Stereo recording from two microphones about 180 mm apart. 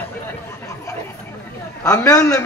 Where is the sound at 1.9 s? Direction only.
20° left (ahead or behind).